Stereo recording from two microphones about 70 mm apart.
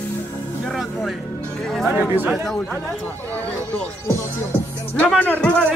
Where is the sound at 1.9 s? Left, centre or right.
Right.